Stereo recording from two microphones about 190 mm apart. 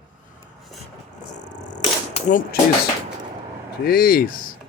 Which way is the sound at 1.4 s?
40° left (ahead or behind).